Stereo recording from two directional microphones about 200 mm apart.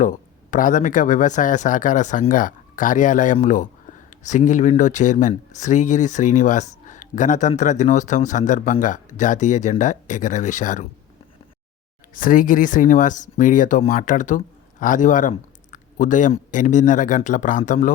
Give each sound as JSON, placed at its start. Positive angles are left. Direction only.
{"t": 0.0, "sound": "speech", "side_deg": 40}
{"t": 12.1, "sound": "speech", "side_deg": 40}